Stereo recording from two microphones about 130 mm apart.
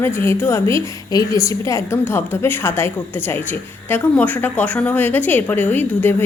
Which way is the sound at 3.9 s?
10° left (ahead or behind).